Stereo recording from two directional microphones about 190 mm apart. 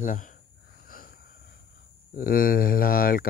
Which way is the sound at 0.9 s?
50° left (ahead or behind).